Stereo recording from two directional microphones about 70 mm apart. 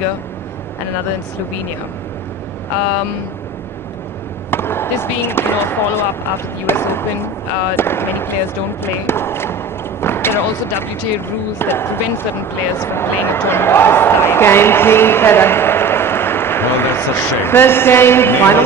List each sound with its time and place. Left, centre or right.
4.5 s speech: left